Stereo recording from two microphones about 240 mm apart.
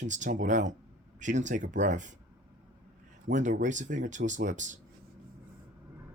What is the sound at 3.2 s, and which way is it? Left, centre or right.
Speech, right.